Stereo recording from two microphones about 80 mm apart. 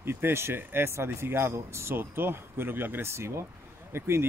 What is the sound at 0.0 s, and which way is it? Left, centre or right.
Speech, right.